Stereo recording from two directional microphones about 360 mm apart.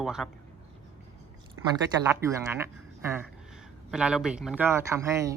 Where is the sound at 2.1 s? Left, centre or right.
Centre.